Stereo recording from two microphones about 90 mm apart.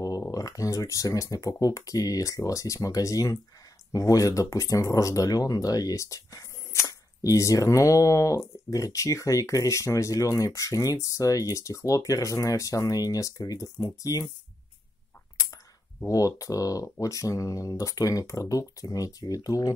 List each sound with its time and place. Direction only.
0.3 s speech: 40° left (ahead or behind)
16.1 s speech: 40° left (ahead or behind)